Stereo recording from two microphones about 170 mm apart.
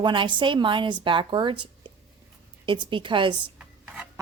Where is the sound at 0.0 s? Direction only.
30° right (ahead or behind).